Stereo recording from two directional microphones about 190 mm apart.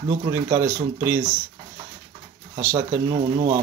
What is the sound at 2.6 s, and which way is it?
Speech, 15° right (ahead or behind).